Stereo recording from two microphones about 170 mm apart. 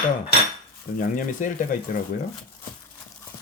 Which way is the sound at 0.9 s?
50° left (ahead or behind).